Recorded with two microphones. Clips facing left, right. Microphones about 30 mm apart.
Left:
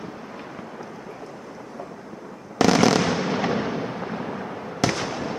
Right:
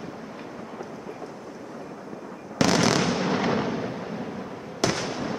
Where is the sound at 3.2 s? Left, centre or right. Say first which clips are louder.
Even; centre.